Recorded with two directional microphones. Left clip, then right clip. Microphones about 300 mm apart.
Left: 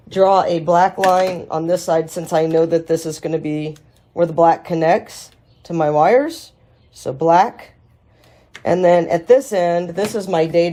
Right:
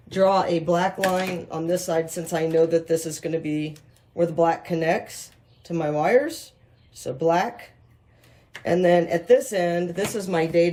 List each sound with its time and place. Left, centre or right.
0.1 s speech: centre